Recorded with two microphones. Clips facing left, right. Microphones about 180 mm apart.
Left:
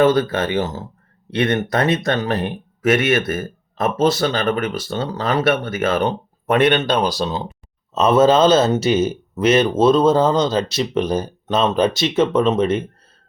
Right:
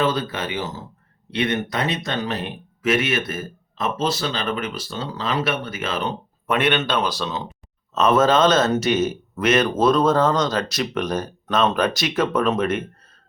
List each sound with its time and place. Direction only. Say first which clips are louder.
0.0 s speech: left 7 dB; 55° left (ahead or behind); by 13.1 s 30° left (ahead or behind)